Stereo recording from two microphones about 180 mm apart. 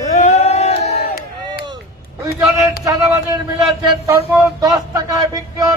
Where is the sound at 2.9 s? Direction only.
20° right (ahead or behind).